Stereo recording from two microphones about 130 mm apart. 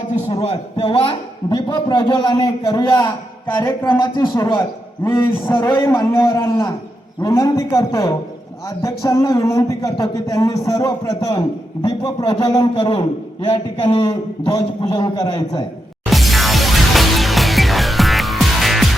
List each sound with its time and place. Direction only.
0.3 s a man's voice: 50° left (ahead or behind)
2.9 s a man's voice: 20° left (ahead or behind)
5.9 s a sound: 20° left (ahead or behind)
16.0 s music: centre (ahead or behind)